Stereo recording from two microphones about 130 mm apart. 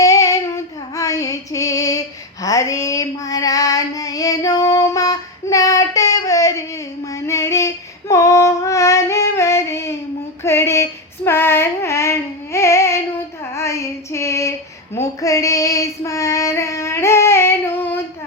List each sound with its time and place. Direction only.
0.0 s female singing: 25° left (ahead or behind)
2.4 s child singing: 25° left (ahead or behind)
10.4 s female singing: 20° left (ahead or behind)
14.9 s child singing: 25° left (ahead or behind)